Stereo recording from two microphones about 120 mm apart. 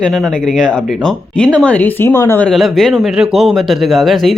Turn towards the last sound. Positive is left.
turn(degrees=0)  # may be behind; listen again after turning